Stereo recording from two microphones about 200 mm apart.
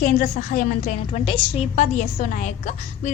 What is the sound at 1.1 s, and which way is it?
A woman's voice, 25° left (ahead or behind).